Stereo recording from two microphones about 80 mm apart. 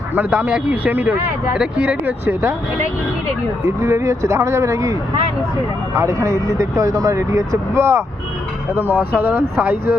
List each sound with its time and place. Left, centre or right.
0.1 s speech: right
3.8 s speech: right